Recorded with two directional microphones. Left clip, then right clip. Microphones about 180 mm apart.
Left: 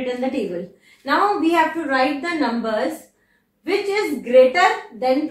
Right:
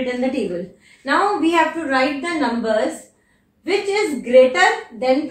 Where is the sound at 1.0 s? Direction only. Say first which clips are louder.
Right 1 dB; 5° left (ahead or behind).